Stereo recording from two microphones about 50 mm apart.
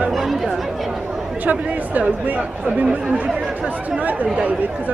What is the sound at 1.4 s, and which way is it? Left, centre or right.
Speech, right.